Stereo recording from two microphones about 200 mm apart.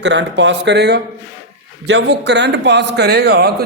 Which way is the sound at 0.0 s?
60° right (ahead or behind).